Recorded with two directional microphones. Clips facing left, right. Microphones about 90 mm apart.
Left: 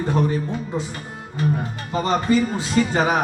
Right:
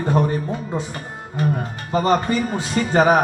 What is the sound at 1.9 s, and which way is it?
Speech, 40° right (ahead or behind).